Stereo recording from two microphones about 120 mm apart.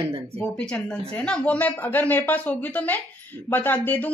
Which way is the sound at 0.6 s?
5° left (ahead or behind).